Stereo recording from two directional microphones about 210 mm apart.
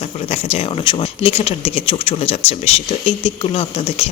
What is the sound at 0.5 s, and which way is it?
Speech, 25° left (ahead or behind).